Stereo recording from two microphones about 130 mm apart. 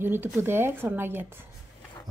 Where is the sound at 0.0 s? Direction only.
15° right (ahead or behind).